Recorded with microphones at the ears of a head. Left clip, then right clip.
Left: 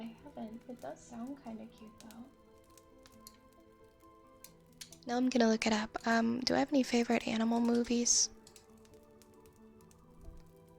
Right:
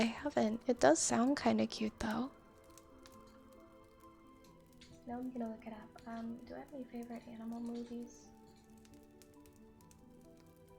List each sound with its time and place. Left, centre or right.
0.0 s a woman's voice: right
4.8 s speech: left